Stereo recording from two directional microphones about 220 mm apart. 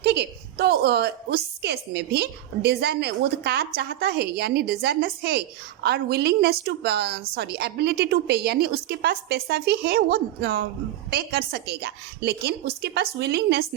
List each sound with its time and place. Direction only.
0.0 s a woman's voice: 50° right (ahead or behind)